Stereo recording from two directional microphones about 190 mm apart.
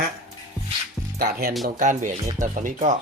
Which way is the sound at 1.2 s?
50° right (ahead or behind).